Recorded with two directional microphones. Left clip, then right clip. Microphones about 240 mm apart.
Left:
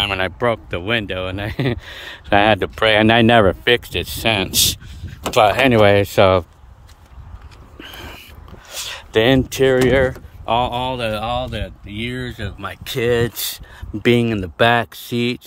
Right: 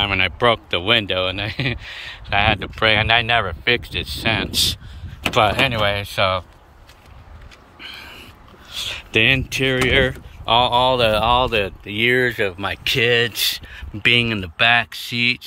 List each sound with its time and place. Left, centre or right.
0.2 s speech: centre; by 6.4 s left
7.8 s speech: left; by 12.6 s centre
12.6 s speech: left
14.2 s speech: centre
14.6 s speech: left